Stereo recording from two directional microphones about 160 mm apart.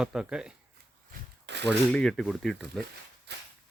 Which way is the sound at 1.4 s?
90° right.